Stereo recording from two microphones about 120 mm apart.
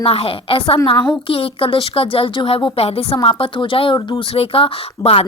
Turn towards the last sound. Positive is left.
turn(degrees=50)  # may be behind; listen again after turning